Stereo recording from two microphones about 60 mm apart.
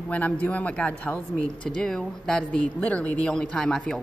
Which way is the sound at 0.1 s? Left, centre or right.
Left.